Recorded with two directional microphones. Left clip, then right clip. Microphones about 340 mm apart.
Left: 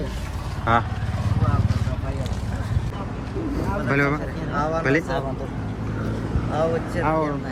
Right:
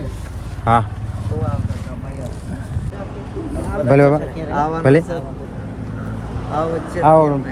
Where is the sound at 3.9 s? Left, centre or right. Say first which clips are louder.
Right 11 dB; centre.